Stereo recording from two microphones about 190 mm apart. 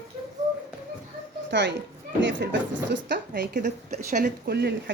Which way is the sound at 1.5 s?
70° right (ahead or behind).